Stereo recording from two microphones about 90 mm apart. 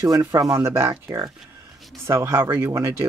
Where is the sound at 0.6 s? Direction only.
30° right (ahead or behind).